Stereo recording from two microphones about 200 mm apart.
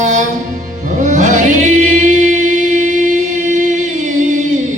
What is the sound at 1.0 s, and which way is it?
Choir, 35° right (ahead or behind).